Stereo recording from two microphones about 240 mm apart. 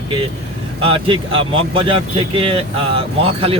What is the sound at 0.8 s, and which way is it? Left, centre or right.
Speech, right.